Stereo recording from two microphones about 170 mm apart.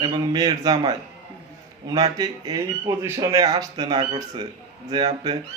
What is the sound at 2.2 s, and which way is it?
Speech, 20° right (ahead or behind).